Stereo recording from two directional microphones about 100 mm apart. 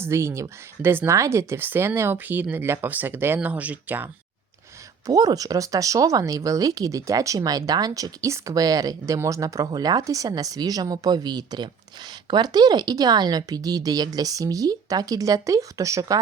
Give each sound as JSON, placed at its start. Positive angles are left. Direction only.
{"t": 0.0, "sound": "speech", "side_deg": -25}
{"t": 5.0, "sound": "speech", "side_deg": -40}